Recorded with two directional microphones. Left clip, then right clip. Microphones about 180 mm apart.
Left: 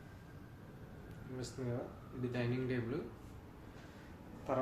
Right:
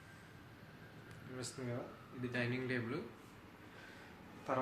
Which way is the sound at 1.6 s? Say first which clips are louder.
Left 4 dB; 5° right (ahead or behind).